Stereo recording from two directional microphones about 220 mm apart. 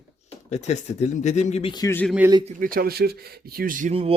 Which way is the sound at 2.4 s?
40° right (ahead or behind).